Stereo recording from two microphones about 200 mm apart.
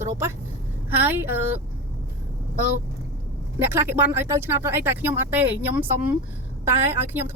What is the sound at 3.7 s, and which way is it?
Speech, 10° right (ahead or behind).